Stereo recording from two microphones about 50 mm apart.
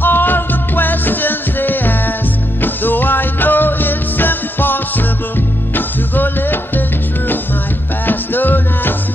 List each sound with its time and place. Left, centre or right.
0.0 s music: left
8.1 s music: left